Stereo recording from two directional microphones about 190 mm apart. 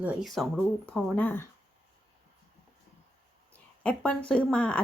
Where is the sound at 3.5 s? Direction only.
5° left (ahead or behind).